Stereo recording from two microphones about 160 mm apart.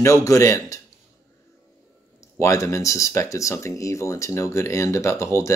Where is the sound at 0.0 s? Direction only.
20° left (ahead or behind).